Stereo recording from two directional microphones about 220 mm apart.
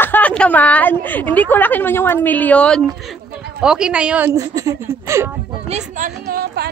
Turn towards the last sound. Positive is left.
turn(degrees=-45)  # may be behind; listen again after turning